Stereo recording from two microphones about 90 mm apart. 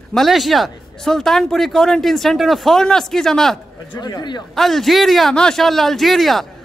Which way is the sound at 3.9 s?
50° left (ahead or behind).